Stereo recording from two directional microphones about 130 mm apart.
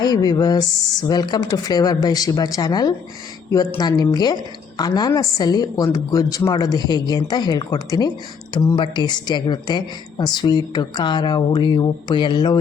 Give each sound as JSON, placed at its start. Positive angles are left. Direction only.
{"t": 0.0, "sound": "a woman's voice", "side_deg": 30}